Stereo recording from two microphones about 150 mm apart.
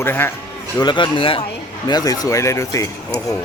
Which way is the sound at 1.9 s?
25° left (ahead or behind).